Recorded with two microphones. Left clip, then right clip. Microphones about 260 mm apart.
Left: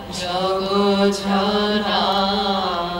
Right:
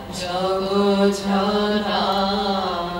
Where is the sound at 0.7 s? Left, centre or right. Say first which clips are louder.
Left 1 dB; centre.